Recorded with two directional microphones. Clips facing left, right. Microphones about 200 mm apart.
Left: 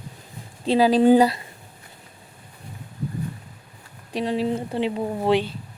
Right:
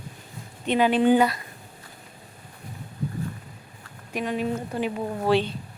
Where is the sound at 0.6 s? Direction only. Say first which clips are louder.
Left 4 dB; 35° left (ahead or behind).